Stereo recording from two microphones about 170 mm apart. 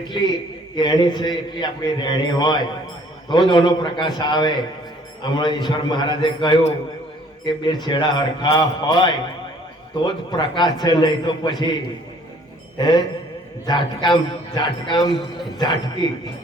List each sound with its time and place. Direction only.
0.1 s a man's voice: 25° left (ahead or behind)
13.7 s a man's voice: 25° left (ahead or behind)